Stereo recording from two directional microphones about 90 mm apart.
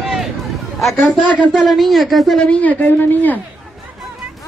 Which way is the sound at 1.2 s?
15° left (ahead or behind).